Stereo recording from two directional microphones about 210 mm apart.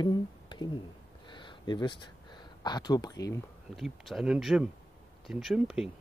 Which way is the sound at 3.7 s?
Centre (ahead or behind).